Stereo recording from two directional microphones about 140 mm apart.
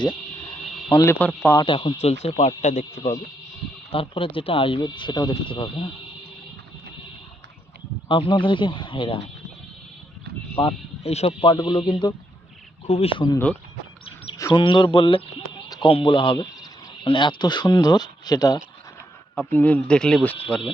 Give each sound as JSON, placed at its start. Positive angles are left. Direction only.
{"t": 0.9, "sound": "speech", "side_deg": 25}
{"t": 1.5, "sound": "speech", "side_deg": 35}
{"t": 3.9, "sound": "speech", "side_deg": 40}
{"t": 8.0, "sound": "speech", "side_deg": 35}
{"t": 10.6, "sound": "speech", "side_deg": 40}
{"t": 12.9, "sound": "speech", "side_deg": 45}
{"t": 14.3, "sound": "bird", "side_deg": 25}
{"t": 14.6, "sound": "speech", "side_deg": 35}
{"t": 19.5, "sound": "speech", "side_deg": 10}